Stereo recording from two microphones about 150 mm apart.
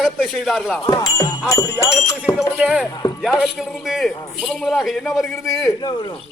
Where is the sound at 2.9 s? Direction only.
25° left (ahead or behind).